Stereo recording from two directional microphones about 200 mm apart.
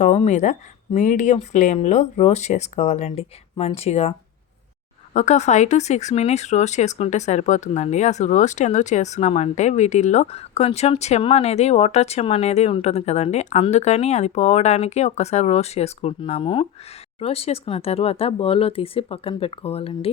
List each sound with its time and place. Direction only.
0.0 s speech: 35° left (ahead or behind)
5.1 s speech: 35° left (ahead or behind)